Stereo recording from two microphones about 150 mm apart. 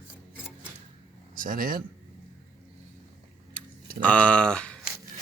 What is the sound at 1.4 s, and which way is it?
Speech, 70° right (ahead or behind).